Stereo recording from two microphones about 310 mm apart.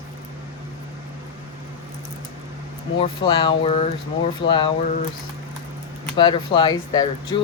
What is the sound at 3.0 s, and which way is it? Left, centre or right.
Speech, centre.